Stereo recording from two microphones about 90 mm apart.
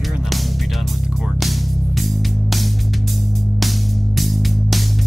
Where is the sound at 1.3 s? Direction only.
Centre (ahead or behind).